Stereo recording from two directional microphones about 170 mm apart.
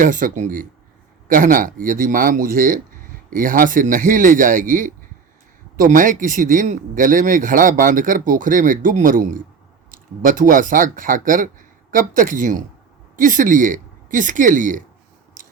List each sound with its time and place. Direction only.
0.0 s speech: 50° right (ahead or behind)